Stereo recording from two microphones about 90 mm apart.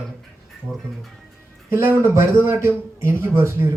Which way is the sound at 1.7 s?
30° right (ahead or behind).